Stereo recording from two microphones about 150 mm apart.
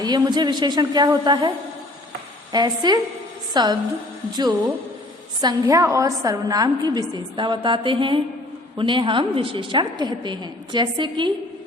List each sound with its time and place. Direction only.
0.0 s a woman's voice: 25° right (ahead or behind)
5.4 s a woman's voice: 25° right (ahead or behind)